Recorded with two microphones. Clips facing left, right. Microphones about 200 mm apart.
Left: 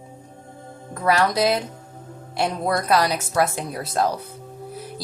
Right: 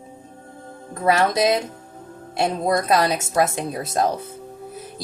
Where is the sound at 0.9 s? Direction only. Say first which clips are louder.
Right 1 dB; 25° right (ahead or behind).